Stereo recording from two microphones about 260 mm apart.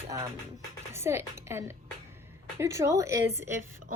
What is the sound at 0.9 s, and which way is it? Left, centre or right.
A woman's voice, centre.